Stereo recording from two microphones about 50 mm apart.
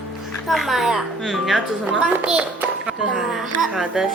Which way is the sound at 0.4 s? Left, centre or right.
Centre.